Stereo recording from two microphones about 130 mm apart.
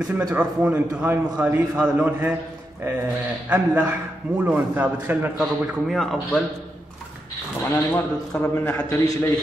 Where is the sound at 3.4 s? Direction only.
10° right (ahead or behind).